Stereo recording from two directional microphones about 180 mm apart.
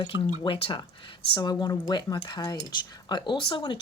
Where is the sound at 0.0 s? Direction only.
25° left (ahead or behind).